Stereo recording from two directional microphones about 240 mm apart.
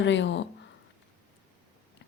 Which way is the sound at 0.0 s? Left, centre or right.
Left.